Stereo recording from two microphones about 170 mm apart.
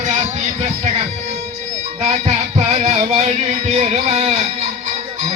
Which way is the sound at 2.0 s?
40° right (ahead or behind).